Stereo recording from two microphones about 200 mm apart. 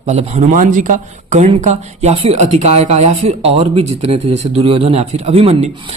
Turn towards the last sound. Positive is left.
turn(degrees=-30)  # may be behind; listen again after turning